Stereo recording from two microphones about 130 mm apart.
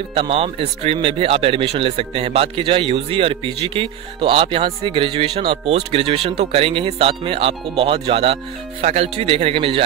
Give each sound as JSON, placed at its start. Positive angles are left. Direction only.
{"t": 0.1, "sound": "speech", "side_deg": -45}